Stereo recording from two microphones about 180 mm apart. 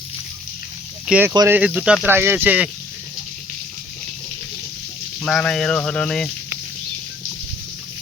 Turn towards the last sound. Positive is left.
turn(degrees=5)  # may be behind; listen again after turning